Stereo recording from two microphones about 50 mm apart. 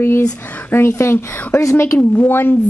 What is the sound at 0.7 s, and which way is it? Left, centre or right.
Speech, left.